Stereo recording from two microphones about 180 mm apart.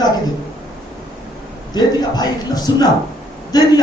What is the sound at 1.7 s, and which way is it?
Speech, 20° left (ahead or behind).